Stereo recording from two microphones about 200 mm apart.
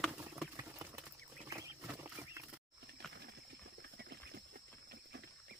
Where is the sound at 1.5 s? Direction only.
15° right (ahead or behind).